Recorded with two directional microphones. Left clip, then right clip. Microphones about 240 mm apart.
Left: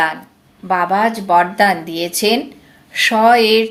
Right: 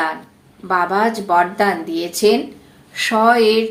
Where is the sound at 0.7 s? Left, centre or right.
Left.